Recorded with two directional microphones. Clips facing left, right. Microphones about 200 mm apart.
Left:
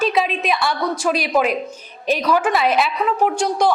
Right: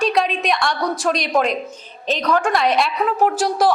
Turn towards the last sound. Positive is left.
turn(degrees=0)  # may be behind; listen again after turning